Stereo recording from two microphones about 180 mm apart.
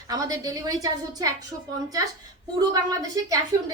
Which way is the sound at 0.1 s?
20° right (ahead or behind).